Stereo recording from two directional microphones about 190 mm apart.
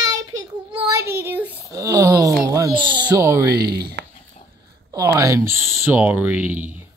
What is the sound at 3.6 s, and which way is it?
Speech, 55° right (ahead or behind).